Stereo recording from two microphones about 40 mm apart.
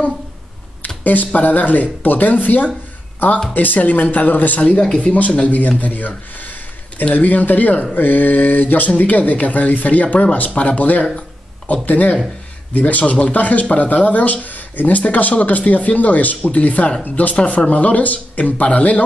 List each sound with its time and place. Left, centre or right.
0.8 s speech: left
4.6 s speech: left